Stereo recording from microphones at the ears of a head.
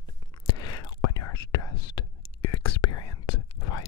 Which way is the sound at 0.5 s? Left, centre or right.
Left.